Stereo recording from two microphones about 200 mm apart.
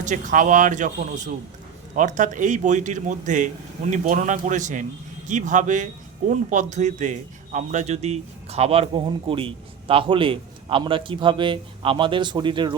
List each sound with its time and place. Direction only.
0.0 s a man's voice: 40° right (ahead or behind); by 12.7 s 25° right (ahead or behind)